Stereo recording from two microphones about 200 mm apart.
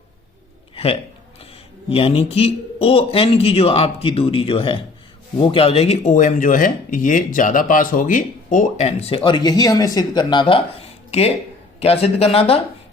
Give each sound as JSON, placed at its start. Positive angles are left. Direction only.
{"t": 1.9, "sound": "speech", "side_deg": 30}